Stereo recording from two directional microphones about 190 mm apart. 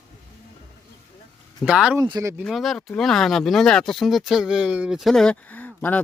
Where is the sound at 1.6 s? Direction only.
5° right (ahead or behind).